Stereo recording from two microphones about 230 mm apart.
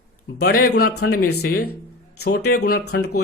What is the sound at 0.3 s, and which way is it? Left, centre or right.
A man's voice, left.